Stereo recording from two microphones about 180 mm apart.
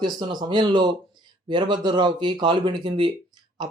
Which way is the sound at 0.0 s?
25° right (ahead or behind).